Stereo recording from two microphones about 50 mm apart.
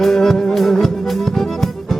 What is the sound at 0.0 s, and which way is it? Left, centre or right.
Music, centre.